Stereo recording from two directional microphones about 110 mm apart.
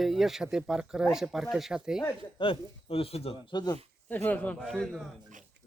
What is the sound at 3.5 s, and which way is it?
Speech, 40° left (ahead or behind).